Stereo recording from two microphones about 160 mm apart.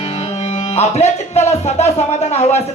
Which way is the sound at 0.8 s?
45° left (ahead or behind).